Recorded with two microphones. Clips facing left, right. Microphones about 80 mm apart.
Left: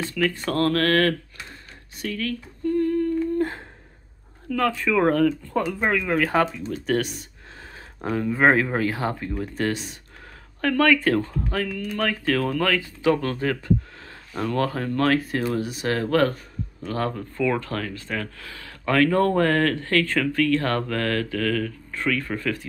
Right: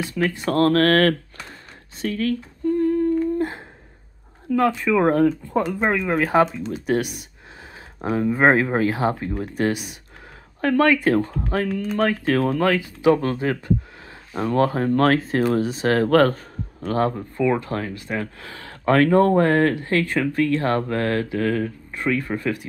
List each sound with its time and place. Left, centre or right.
0.2 s speech: right
2.7 s humming: centre
4.5 s speech: centre; by 16.3 s right
16.8 s speech: right